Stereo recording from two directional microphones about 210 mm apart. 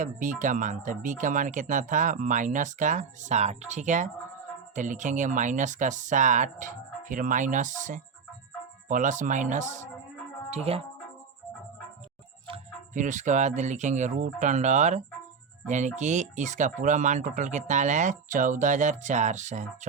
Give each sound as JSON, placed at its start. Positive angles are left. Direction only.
{"t": 0.0, "sound": "speech", "side_deg": -35}
{"t": 12.5, "sound": "speech", "side_deg": -30}